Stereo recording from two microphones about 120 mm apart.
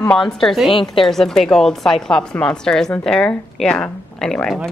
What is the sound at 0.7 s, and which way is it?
Speech, 45° left (ahead or behind).